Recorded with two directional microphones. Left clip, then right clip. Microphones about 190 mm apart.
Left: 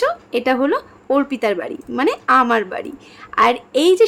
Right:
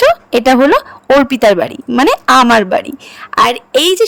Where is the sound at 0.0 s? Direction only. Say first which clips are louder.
Right 10 dB; 55° right (ahead or behind).